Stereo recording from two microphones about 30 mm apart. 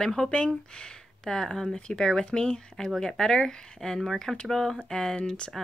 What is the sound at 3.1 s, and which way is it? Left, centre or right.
Speech, left.